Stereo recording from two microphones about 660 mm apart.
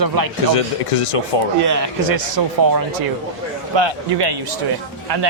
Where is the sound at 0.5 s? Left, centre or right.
Left.